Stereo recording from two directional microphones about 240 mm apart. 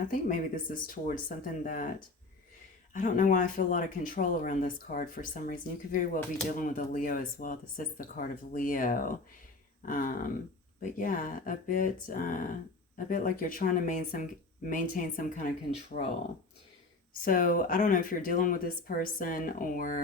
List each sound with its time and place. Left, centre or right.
0.1 s speech: left
2.9 s speech: left
17.2 s speech: left